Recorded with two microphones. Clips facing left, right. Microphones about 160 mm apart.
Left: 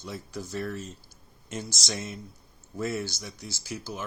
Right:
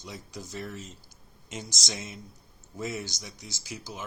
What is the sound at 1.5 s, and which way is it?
Speech, 15° right (ahead or behind).